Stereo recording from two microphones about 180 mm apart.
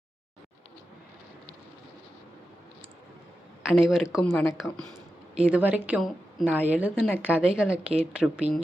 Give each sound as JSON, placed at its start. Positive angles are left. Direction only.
{"t": 3.6, "sound": "a woman's voice", "side_deg": 0}